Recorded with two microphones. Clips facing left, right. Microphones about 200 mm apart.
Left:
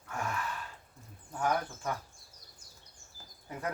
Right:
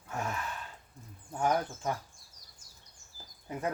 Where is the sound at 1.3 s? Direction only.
20° right (ahead or behind).